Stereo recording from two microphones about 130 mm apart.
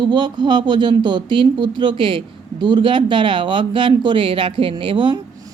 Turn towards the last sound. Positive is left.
turn(degrees=-40)  # may be behind; listen again after turning